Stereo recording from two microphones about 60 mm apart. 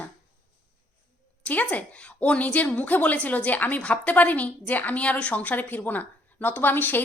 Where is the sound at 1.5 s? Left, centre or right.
Left.